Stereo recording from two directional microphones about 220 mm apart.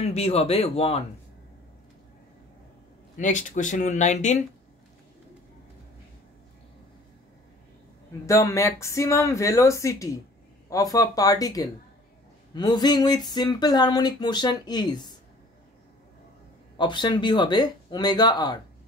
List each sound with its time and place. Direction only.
0.0 s speech: 30° left (ahead or behind)
3.2 s speech: 35° left (ahead or behind)
8.3 s speech: 15° left (ahead or behind)
16.7 s speech: 20° left (ahead or behind)